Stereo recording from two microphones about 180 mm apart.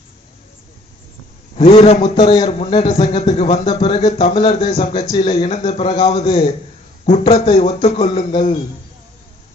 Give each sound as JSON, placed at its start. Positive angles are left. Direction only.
{"t": 1.5, "sound": "a man's voice", "side_deg": 35}